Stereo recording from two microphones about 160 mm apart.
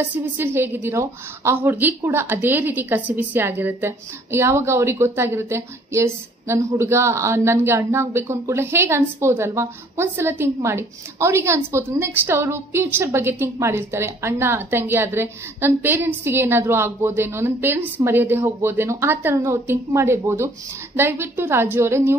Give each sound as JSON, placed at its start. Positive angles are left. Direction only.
{"t": 0.0, "sound": "speech", "side_deg": -15}